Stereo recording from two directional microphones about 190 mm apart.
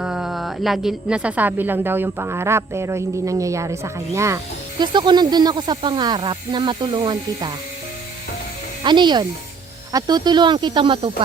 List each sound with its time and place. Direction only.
0.0 s a woman's voice: 5° right (ahead or behind); by 7.5 s 25° right (ahead or behind)
8.8 s speech: 25° right (ahead or behind)